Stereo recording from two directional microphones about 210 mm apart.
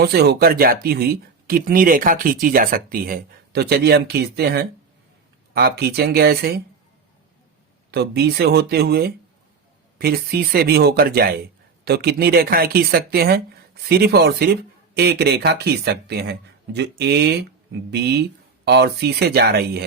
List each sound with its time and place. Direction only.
0.0 s speech: 50° right (ahead or behind)
7.9 s speech: 50° right (ahead or behind)